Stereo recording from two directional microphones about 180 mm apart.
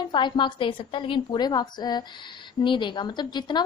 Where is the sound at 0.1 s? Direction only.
25° left (ahead or behind).